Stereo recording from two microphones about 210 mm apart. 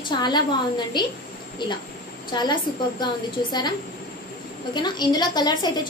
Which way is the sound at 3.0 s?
20° left (ahead or behind).